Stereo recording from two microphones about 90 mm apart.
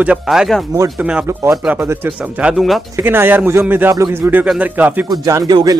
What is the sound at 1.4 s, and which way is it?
Speech, 30° right (ahead or behind).